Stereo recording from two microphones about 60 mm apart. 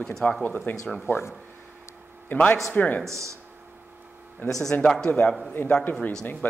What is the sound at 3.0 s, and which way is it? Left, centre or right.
Speech, right.